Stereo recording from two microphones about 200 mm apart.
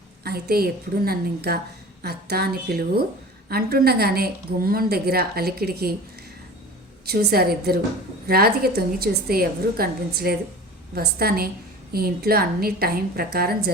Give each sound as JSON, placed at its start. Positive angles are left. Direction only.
{"t": 0.3, "sound": "a woman's voice", "side_deg": -50}
{"t": 7.1, "sound": "a woman's voice", "side_deg": -50}